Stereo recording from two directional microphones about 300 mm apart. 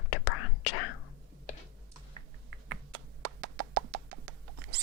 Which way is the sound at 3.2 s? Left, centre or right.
Right.